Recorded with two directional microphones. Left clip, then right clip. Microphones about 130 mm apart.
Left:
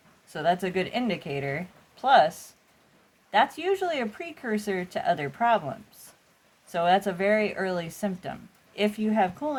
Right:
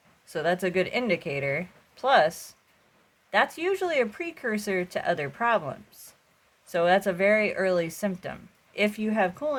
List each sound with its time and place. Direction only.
0.3 s speech: 60° right (ahead or behind)